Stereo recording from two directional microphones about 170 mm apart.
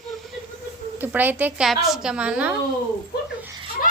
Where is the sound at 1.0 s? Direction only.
10° right (ahead or behind).